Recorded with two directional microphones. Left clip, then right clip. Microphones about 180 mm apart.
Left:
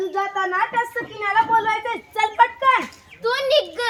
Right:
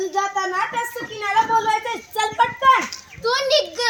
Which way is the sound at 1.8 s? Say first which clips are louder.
Left 1 dB; 15° right (ahead or behind).